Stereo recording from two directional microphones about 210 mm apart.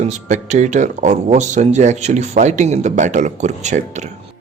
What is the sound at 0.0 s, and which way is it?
Speech, 35° right (ahead or behind).